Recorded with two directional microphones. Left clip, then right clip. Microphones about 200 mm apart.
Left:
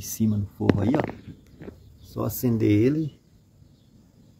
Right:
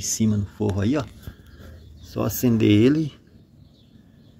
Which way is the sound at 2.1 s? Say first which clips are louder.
Right 4 dB; 5° right (ahead or behind).